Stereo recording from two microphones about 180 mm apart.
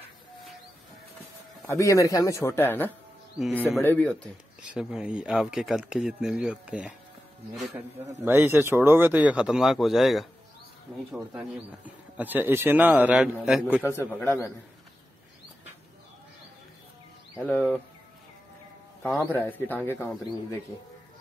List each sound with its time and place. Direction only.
1.7 s speech: 15° left (ahead or behind)
3.4 s speech: centre (ahead or behind)
3.8 s speech: 10° left (ahead or behind)
4.6 s speech: 5° right (ahead or behind)
8.2 s speech: 10° right (ahead or behind)
11.3 s speech: 10° right (ahead or behind)
13.8 s speech: 15° left (ahead or behind)
17.4 s speech: 10° left (ahead or behind)
19.0 s speech: 10° left (ahead or behind)